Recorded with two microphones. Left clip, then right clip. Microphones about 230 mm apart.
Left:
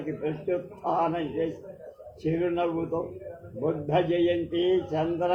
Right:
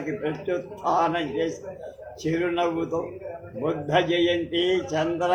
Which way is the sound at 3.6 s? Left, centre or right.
Right.